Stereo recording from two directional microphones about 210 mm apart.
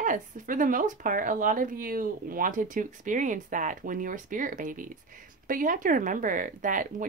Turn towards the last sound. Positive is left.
turn(degrees=-40)  # may be behind; listen again after turning